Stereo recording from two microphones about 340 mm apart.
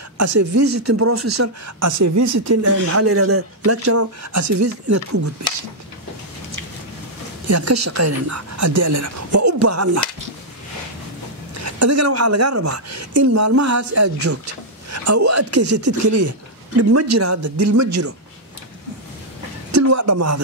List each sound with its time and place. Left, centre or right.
0.2 s speech: right
7.4 s a woman's voice: right
11.5 s speech: right
17.4 s a woman's voice: right
19.7 s speech: right